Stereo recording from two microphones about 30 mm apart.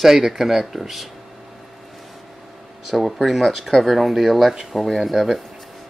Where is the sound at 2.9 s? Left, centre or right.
Centre.